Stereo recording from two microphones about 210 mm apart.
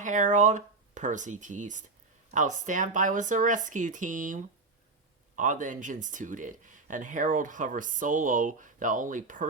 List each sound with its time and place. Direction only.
0.0 s speech: 35° right (ahead or behind)